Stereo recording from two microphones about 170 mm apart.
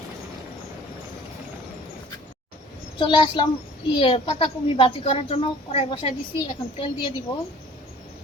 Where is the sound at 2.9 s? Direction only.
30° left (ahead or behind).